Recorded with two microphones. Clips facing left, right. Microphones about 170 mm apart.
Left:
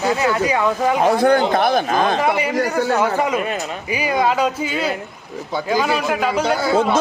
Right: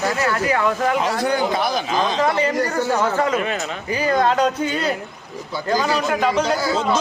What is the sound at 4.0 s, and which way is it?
A man's voice, 10° left (ahead or behind).